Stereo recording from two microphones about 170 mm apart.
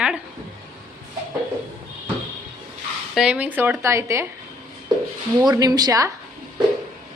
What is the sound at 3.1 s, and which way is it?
Speech, 5° right (ahead or behind).